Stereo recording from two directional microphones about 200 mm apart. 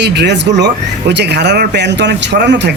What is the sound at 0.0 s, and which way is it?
Speech, 60° right (ahead or behind).